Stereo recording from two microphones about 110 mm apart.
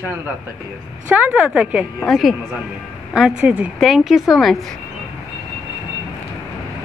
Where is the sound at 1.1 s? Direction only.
15° right (ahead or behind).